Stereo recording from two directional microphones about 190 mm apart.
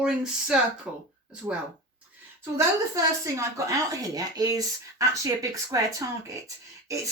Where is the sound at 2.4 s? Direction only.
15° right (ahead or behind).